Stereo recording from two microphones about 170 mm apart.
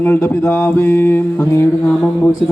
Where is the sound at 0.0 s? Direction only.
15° left (ahead or behind).